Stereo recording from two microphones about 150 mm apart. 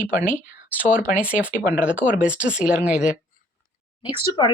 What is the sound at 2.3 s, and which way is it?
Speech, 10° right (ahead or behind).